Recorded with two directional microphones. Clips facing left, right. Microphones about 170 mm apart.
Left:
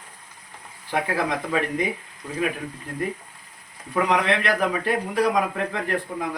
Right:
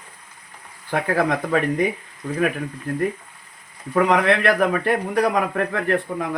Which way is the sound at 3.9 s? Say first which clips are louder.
Right 4 dB; 55° right (ahead or behind).